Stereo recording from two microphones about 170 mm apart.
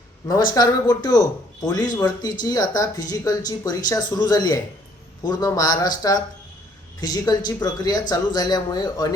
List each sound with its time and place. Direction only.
0.3 s speech: 25° left (ahead or behind)